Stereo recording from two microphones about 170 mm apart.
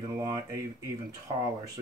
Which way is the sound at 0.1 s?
20° right (ahead or behind).